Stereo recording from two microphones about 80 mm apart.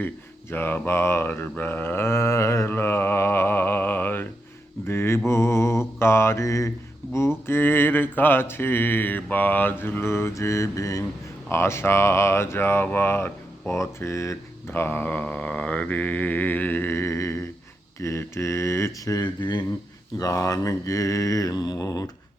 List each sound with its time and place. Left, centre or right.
0.5 s a sound: left
4.9 s mantra: left
6.0 s speech: left
7.4 s a sound: left
11.4 s speech: left
14.7 s a sound: left
18.0 s speech: left
19.2 s speech: left
20.1 s mantra: left